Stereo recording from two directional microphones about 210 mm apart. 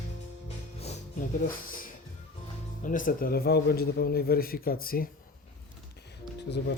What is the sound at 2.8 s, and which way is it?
A man's voice, 40° left (ahead or behind).